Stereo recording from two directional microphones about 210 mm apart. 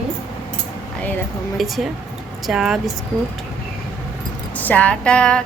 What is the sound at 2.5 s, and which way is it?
Speech, 5° right (ahead or behind).